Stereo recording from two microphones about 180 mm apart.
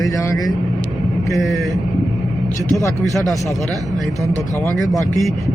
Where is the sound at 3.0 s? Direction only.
Centre (ahead or behind).